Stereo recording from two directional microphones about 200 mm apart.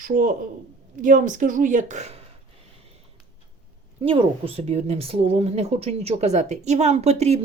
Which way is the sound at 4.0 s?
25° right (ahead or behind).